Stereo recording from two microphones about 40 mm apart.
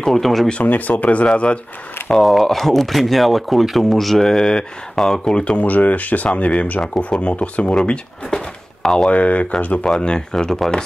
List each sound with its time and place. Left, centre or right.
0.0 s speech: centre
0.7 s speech: left
2.0 s speech: centre
4.9 s speech: centre
5.2 s speech: left
5.6 s speech: left
7.7 s speech: centre
9.1 s speech: left
9.9 s speech: left
10.3 s speech: centre